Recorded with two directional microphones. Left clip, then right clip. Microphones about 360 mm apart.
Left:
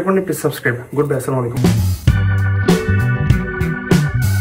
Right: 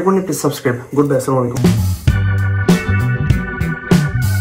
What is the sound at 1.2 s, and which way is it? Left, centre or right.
Music, centre.